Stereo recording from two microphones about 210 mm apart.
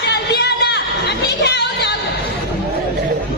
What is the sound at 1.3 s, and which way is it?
Music, 50° left (ahead or behind).